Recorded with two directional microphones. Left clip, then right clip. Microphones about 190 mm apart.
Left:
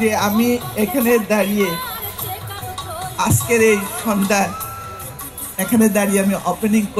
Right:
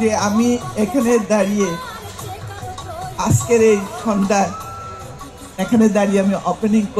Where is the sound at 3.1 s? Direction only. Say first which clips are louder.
Right 1 dB; 30° right (ahead or behind).